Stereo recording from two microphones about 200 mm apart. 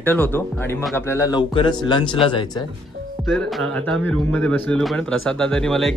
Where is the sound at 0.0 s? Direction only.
10° left (ahead or behind); by 2.6 s 25° left (ahead or behind).